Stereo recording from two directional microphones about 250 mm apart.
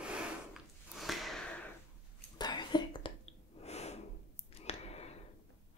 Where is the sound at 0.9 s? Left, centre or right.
Centre.